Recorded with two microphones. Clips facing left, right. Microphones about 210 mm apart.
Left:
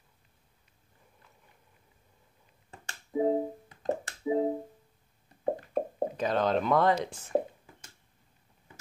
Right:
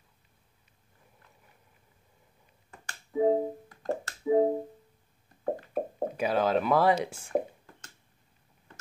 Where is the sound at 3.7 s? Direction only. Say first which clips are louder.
Left 1 dB; 20° left (ahead or behind).